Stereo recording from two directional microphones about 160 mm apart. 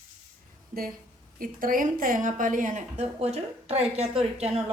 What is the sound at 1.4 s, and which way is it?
Speech, 60° right (ahead or behind).